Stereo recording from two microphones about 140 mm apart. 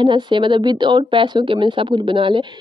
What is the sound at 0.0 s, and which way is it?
A woman's voice, 35° right (ahead or behind).